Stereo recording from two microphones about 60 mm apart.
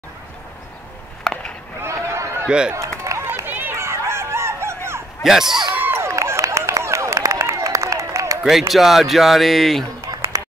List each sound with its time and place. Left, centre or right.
1.2 s chop: centre
1.8 s a sound: right
2.4 s speech: centre
3.0 s run: right
3.4 s run: right
3.7 s dog: right
5.2 s speech: centre
5.8 s a sound: right
6.4 s a sound: right
8.5 s speech: centre